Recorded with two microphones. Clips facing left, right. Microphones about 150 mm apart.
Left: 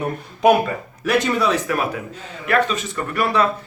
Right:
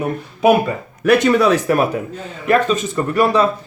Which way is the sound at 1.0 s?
55° right (ahead or behind).